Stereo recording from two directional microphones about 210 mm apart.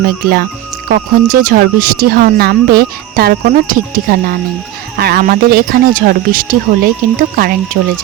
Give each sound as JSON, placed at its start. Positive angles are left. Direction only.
{"t": 0.0, "sound": "speech", "side_deg": -50}